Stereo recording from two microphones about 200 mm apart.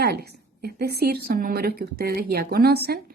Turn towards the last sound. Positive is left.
turn(degrees=-50)  # may be behind; listen again after turning